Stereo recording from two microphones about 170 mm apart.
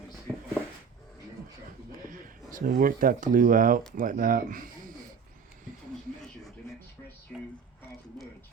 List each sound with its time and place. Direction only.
2.0 s speech: 55° right (ahead or behind)
7.3 s music: 10° left (ahead or behind)